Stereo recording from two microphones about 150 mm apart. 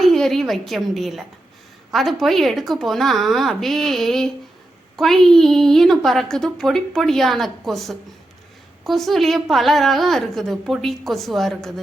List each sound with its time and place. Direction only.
0.0 s a woman's voice: centre (ahead or behind)